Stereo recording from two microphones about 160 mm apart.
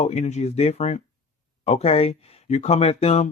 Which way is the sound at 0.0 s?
45° left (ahead or behind).